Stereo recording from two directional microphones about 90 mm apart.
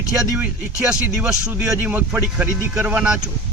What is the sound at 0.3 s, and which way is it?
Speech, 20° right (ahead or behind).